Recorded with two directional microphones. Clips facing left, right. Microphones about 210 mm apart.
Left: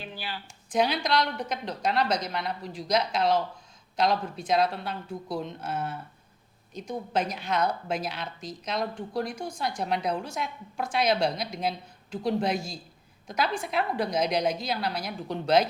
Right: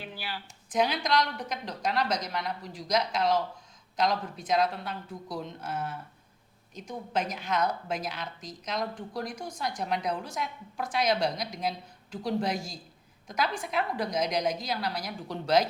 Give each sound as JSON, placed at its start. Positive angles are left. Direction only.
{"t": 0.7, "sound": "a woman's voice", "side_deg": 30}